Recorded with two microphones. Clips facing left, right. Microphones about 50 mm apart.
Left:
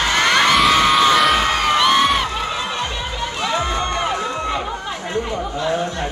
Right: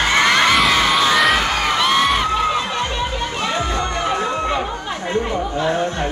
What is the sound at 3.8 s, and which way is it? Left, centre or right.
Music, left.